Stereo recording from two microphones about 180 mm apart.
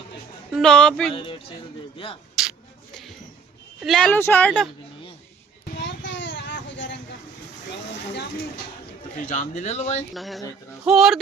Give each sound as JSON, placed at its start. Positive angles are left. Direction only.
{"t": 0.5, "sound": "speech", "side_deg": 5}
{"t": 1.1, "sound": "speech", "side_deg": 30}
{"t": 2.4, "sound": "a sound", "side_deg": -5}
{"t": 3.8, "sound": "speech", "side_deg": 5}
{"t": 5.8, "sound": "a sound", "side_deg": 85}
{"t": 9.2, "sound": "speech", "side_deg": 40}
{"t": 10.2, "sound": "speech", "side_deg": 0}